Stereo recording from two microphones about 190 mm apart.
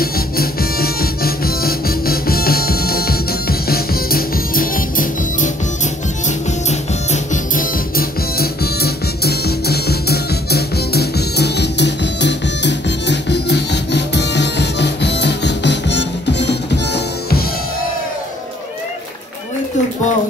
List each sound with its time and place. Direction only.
0.0 s music: 50° left (ahead or behind)
7.9 s music: 55° left (ahead or behind)